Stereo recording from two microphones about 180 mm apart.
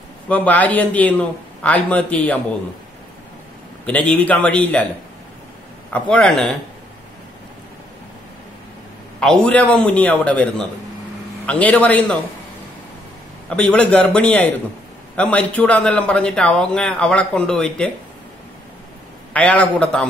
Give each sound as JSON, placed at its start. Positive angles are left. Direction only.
{"t": 0.3, "sound": "a man's voice", "side_deg": 10}
{"t": 3.8, "sound": "a man's voice", "side_deg": 5}
{"t": 5.9, "sound": "a man's voice", "side_deg": 5}
{"t": 9.2, "sound": "a man's voice", "side_deg": 5}
{"t": 13.5, "sound": "a man's voice", "side_deg": 5}
{"t": 19.3, "sound": "a man's voice", "side_deg": 5}